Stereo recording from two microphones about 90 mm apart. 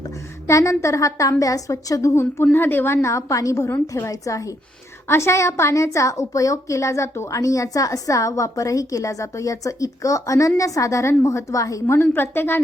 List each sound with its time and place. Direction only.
0.4 s a woman's voice: 35° left (ahead or behind)
11.9 s a woman's voice: 25° left (ahead or behind)